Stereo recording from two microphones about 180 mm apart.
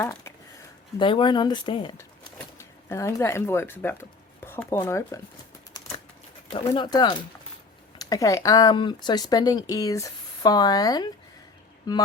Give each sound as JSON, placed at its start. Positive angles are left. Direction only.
{"t": 0.0, "sound": "speech", "side_deg": 10}
{"t": 0.9, "sound": "speech", "side_deg": 25}
{"t": 2.0, "sound": "speech", "side_deg": 15}
{"t": 6.5, "sound": "speech", "side_deg": 25}